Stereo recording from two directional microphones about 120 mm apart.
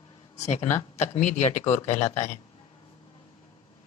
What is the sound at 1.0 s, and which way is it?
Speech, 75° left (ahead or behind).